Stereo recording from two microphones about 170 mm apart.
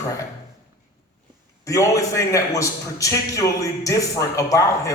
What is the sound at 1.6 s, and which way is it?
A man's voice, 20° left (ahead or behind).